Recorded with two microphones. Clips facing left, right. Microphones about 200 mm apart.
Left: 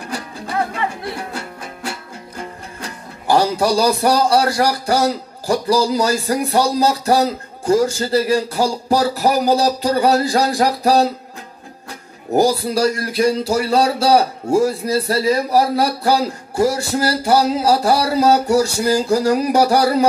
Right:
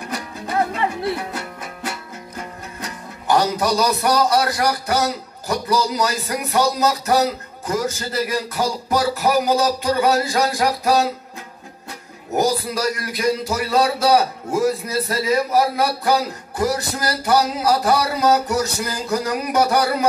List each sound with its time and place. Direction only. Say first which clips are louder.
3.3 s speech: left 3 dB; 30° left (ahead or behind)
12.3 s speech: left 4 dB; 35° left (ahead or behind)